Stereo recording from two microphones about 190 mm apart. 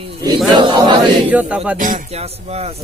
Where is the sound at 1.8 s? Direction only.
40° right (ahead or behind).